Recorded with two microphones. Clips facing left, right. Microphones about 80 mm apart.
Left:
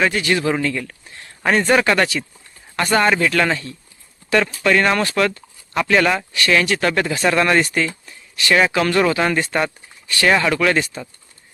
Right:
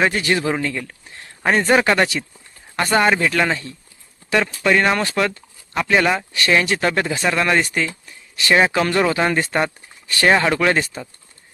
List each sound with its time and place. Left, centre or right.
0.0 s a man's voice: right
7.2 s a man's voice: centre
8.4 s speech: right
10.1 s speech: right